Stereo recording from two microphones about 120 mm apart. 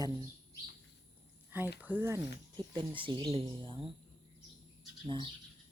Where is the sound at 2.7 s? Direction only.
40° right (ahead or behind).